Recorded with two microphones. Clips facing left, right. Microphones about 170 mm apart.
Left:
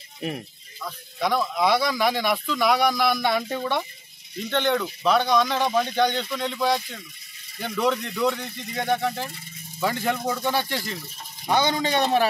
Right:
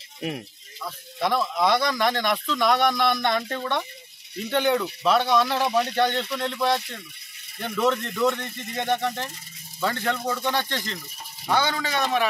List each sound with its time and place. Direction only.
0.2 s speech: centre (ahead or behind)
4.4 s speech: 5° right (ahead or behind)
9.8 s speech: 10° left (ahead or behind); by 12.3 s 30° left (ahead or behind)